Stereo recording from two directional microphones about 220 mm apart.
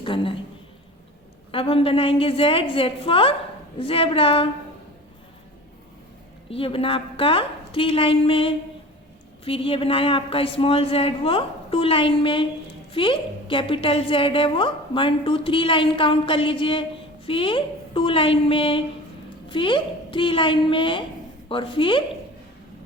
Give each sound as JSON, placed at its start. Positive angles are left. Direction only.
{"t": 0.0, "sound": "a sound", "side_deg": 25}
{"t": 1.5, "sound": "a woman's voice", "side_deg": 25}
{"t": 6.5, "sound": "a woman's voice", "side_deg": 25}